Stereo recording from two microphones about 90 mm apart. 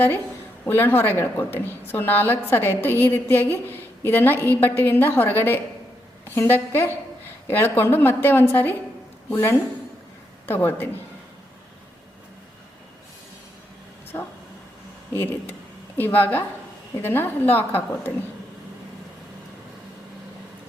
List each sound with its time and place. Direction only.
0.6 s a woman's voice: 25° left (ahead or behind)
14.1 s dog: 30° left (ahead or behind)
15.1 s a woman's voice: 25° left (ahead or behind)